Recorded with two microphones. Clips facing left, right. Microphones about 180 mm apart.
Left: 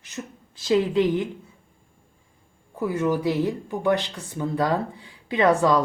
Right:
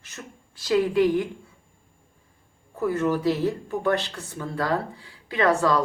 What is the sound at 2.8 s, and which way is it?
Speech, 10° left (ahead or behind).